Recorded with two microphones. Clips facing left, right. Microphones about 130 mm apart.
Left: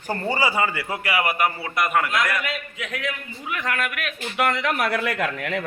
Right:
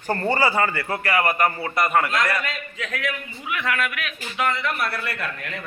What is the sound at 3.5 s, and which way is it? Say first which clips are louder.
A man's voice: right 1 dB; 40° left (ahead or behind).